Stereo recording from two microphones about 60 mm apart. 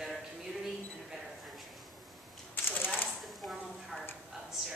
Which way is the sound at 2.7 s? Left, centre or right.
Left.